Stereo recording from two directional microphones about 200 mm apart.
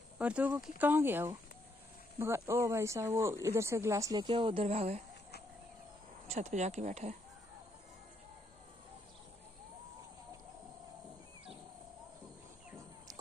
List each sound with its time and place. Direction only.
0.2 s speech: 5° right (ahead or behind); by 5.0 s 30° right (ahead or behind)
6.2 s speech: 35° right (ahead or behind)